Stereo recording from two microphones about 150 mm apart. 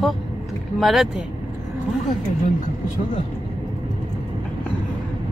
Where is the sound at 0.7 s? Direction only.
Centre (ahead or behind).